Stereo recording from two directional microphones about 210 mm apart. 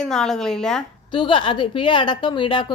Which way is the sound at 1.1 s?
25° left (ahead or behind).